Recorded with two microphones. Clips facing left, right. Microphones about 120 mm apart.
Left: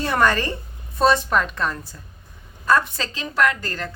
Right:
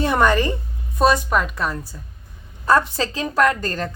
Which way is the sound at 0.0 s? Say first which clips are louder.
Right 3 dB; 15° right (ahead or behind).